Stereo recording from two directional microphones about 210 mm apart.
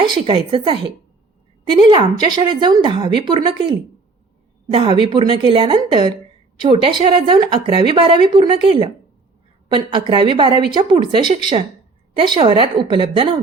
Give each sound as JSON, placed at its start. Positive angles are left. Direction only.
{"t": 0.0, "sound": "speech", "side_deg": -25}